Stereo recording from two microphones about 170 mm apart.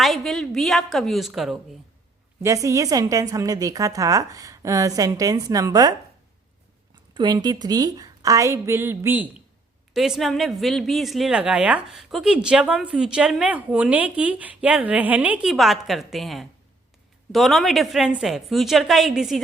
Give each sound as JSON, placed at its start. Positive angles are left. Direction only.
{"t": 0.0, "sound": "a woman's voice", "side_deg": 0}
{"t": 2.4, "sound": "a woman's voice", "side_deg": -20}
{"t": 7.1, "sound": "a woman's voice", "side_deg": -25}